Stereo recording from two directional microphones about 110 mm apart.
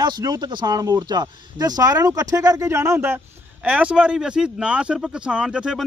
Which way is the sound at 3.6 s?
10° right (ahead or behind).